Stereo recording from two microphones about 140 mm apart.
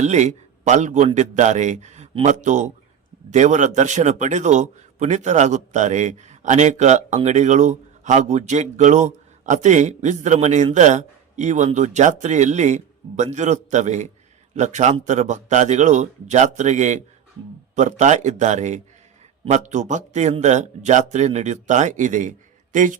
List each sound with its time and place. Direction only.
0.0 s a man's voice: 55° right (ahead or behind)